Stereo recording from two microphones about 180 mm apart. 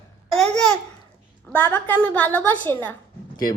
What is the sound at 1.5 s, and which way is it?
Speech, 10° left (ahead or behind).